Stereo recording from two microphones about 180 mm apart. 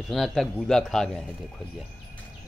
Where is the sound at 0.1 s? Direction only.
Centre (ahead or behind).